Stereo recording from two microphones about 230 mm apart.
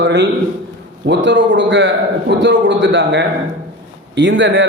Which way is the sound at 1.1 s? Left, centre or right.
Right.